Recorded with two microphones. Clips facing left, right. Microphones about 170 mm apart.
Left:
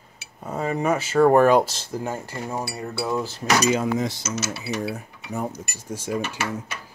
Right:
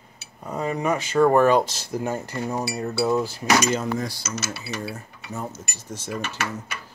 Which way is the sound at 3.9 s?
20° left (ahead or behind).